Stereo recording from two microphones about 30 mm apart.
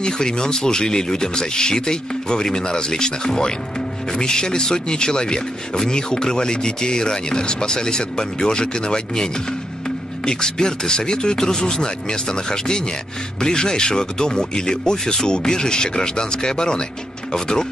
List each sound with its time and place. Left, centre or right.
0.0 s speech: left